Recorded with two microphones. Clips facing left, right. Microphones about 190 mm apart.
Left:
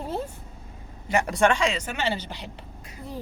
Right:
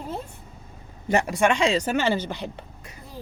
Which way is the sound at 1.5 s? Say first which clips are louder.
Right 4 dB; 30° right (ahead or behind).